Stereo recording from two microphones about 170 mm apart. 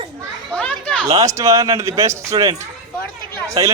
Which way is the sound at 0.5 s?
5° left (ahead or behind).